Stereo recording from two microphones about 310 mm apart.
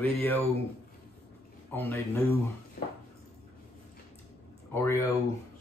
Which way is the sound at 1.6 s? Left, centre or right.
Centre.